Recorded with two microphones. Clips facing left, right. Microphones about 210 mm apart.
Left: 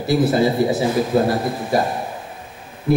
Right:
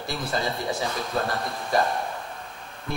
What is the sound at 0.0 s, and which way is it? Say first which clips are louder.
A man's voice: left 12 dB; 5° left (ahead or behind).